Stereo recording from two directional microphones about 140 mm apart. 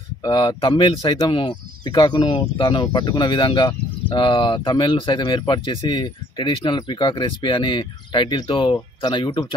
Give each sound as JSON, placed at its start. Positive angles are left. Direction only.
{"t": 0.2, "sound": "speech", "side_deg": 30}